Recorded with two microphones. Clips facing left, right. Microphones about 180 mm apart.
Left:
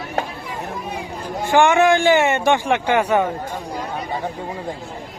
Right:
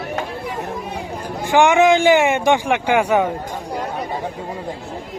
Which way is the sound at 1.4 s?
15° right (ahead or behind).